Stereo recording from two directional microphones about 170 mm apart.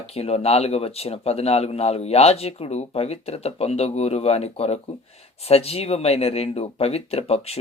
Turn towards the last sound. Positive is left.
turn(degrees=35)  # may be behind; listen again after turning